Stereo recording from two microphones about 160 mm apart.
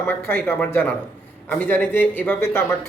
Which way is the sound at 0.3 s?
15° left (ahead or behind).